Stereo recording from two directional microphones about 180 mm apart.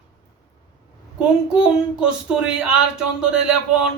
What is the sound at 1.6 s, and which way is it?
Speech, 5° right (ahead or behind).